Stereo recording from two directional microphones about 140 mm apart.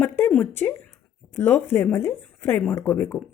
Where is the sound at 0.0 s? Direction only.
10° left (ahead or behind).